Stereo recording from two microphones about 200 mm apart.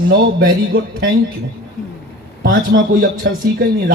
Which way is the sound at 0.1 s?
45° right (ahead or behind).